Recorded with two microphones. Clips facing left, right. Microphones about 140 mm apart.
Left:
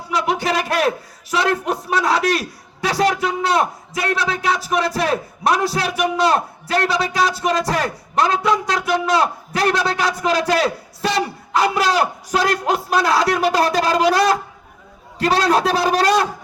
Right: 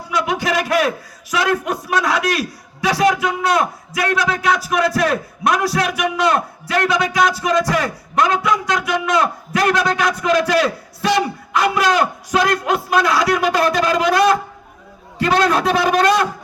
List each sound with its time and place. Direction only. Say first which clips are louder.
0.1 s a man's voice: even; 30° left (ahead or behind)